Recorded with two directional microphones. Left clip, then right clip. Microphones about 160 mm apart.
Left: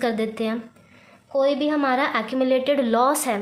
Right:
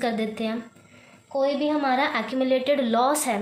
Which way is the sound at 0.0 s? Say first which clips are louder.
Left 3 dB; 40° left (ahead or behind).